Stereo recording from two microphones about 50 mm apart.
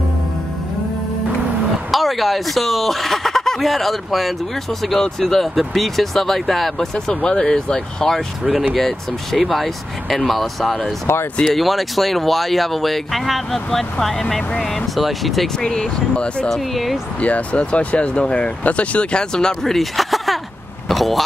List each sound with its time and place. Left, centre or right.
1.9 s speech: centre
7.2 s speech: centre
11.1 s speech: left
11.4 s speech: centre
15.6 s speech: centre
16.4 s speech: centre
17.2 s speech: left
19.3 s speech: centre